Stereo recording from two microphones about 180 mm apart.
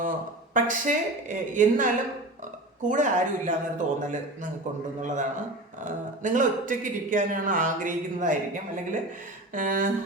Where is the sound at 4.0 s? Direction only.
45° right (ahead or behind).